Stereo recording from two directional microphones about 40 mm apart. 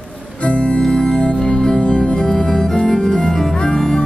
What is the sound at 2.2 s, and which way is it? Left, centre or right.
Organ, centre.